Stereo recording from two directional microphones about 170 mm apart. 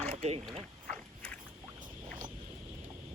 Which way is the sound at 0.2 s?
35° right (ahead or behind).